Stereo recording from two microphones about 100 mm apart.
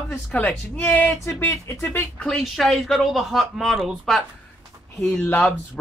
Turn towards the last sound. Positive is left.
turn(degrees=15)  # may be behind; listen again after turning